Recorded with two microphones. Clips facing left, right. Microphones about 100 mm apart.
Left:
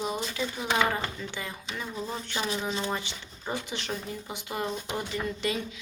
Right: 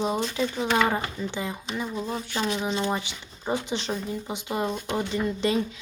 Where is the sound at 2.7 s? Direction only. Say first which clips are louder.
Right 4 dB; 20° right (ahead or behind).